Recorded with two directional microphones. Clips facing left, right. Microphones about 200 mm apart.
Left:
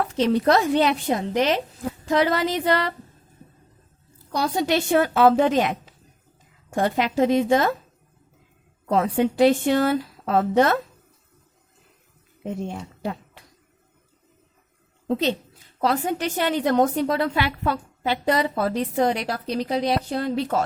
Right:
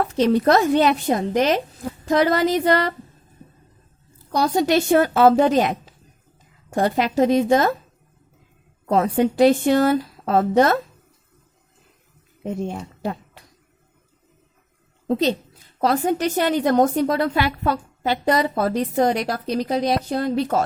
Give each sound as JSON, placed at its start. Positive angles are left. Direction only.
{"t": 0.0, "sound": "a woman's voice", "side_deg": -45}
{"t": 4.3, "sound": "a woman's voice", "side_deg": -40}
{"t": 8.9, "sound": "a woman's voice", "side_deg": -40}
{"t": 12.6, "sound": "speech", "side_deg": -45}
{"t": 15.0, "sound": "a woman's voice", "side_deg": -40}